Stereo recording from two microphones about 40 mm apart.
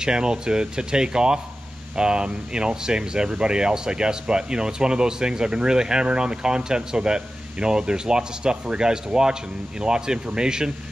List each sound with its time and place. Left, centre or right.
0.0 s speech: centre